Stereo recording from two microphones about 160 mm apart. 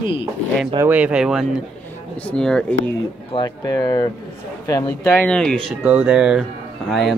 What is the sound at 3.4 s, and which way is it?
Speech, 25° left (ahead or behind).